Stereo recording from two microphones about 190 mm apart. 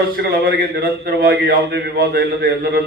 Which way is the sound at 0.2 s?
55° right (ahead or behind).